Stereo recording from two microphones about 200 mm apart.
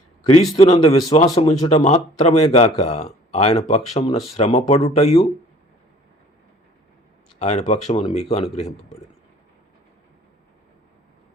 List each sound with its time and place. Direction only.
0.5 s speech: 30° left (ahead or behind)
7.3 s speech: 35° left (ahead or behind)